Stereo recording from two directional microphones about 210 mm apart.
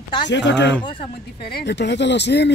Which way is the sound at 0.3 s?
55° left (ahead or behind).